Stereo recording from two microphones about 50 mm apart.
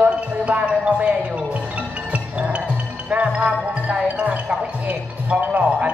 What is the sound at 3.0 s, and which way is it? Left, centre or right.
Speech, right.